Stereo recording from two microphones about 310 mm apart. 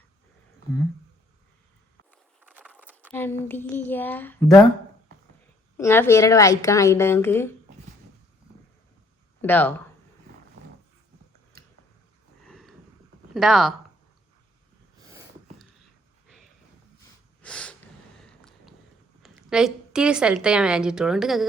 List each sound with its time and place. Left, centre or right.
2.4 s a sound: centre
3.1 s speech: centre
5.7 s speech: centre
9.4 s speech: centre
12.5 s a sound: centre
13.3 s speech: centre
17.4 s snort: centre
18.2 s a sound: centre
19.2 s a woman's voice: centre